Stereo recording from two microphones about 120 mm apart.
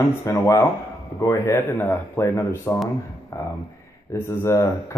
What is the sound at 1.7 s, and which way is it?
Speech, 15° left (ahead or behind).